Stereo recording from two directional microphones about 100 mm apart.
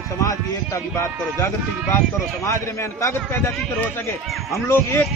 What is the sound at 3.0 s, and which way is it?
Speech, 25° left (ahead or behind).